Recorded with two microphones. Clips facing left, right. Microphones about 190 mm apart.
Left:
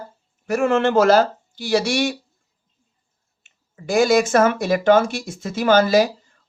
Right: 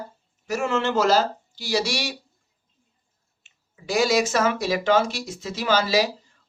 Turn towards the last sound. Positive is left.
turn(degrees=50)  # may be behind; listen again after turning